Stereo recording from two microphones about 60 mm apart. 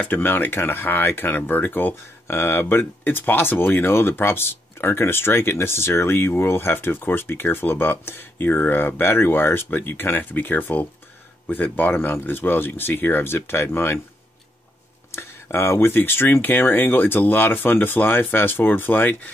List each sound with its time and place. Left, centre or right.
0.0 s speech: left
15.0 s speech: left